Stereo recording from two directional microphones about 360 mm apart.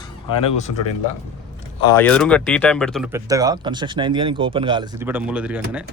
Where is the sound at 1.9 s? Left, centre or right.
Centre.